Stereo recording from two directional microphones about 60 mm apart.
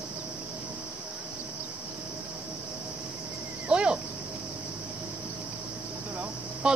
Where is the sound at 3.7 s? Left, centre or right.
Centre.